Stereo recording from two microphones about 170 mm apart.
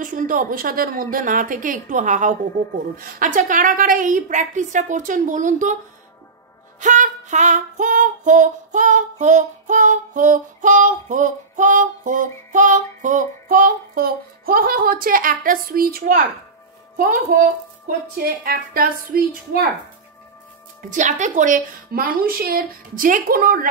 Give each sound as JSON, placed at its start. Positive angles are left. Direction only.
{"t": 0.0, "sound": "female singing", "side_deg": -55}
{"t": 6.8, "sound": "female singing", "side_deg": -45}
{"t": 16.9, "sound": "a woman's voice", "side_deg": -55}
{"t": 20.9, "sound": "a woman's voice", "side_deg": -45}